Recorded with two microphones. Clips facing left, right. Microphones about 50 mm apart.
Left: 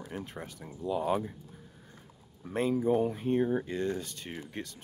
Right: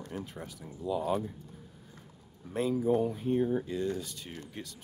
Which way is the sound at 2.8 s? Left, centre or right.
Centre.